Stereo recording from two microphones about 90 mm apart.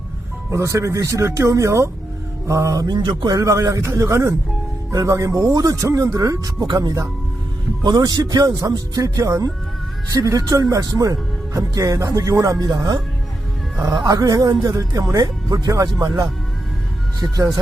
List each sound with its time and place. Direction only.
0.5 s speech: 35° right (ahead or behind)
2.8 s speech: 50° right (ahead or behind)
13.7 s speech: 35° right (ahead or behind)
14.0 s speech: 45° right (ahead or behind)